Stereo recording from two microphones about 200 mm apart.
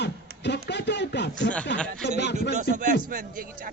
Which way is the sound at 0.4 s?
60° left (ahead or behind).